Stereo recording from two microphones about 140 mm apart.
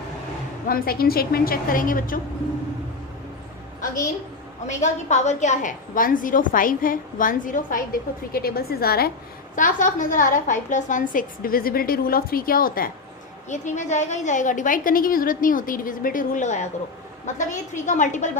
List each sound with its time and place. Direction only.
0.7 s a woman's voice: 90° left
4.6 s a woman's voice: 55° left (ahead or behind); by 9.1 s 90° left
9.6 s a woman's voice: 65° left (ahead or behind); by 12.9 s 90° left
13.5 s a woman's voice: 60° left (ahead or behind)